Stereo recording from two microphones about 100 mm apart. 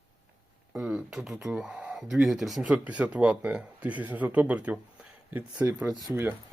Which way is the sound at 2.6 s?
15° right (ahead or behind).